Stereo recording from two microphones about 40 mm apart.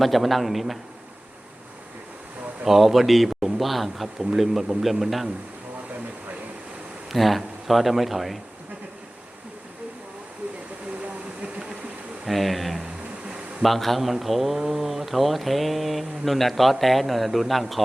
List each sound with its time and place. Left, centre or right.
0.0 s a man's voice: centre
2.6 s a man's voice: centre
7.1 s a man's voice: centre
11.0 s a sound: right
12.3 s a man's voice: centre